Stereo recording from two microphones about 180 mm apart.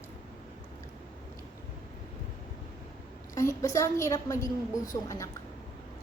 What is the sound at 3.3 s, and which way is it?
A woman's voice, 15° left (ahead or behind).